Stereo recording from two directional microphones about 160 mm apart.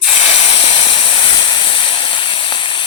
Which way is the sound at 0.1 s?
35° left (ahead or behind).